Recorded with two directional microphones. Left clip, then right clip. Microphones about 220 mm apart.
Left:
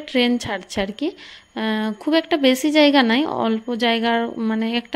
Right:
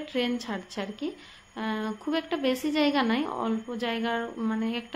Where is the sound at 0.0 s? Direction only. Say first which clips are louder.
Left 10 dB; 40° left (ahead or behind).